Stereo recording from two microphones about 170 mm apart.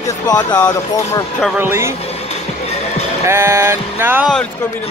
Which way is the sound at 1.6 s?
15° right (ahead or behind).